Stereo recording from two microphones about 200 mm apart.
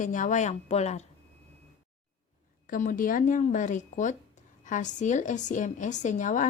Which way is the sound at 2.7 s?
45° left (ahead or behind).